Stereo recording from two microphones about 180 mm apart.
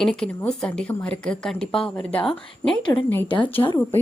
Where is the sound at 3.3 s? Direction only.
25° left (ahead or behind).